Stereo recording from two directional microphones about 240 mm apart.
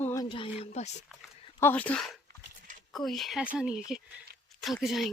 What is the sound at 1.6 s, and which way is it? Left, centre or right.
Speech, centre.